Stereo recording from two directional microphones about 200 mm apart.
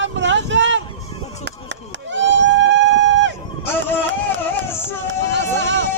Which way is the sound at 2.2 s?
65° right (ahead or behind).